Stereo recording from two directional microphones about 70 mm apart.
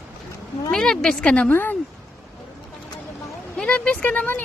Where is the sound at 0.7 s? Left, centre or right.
Centre.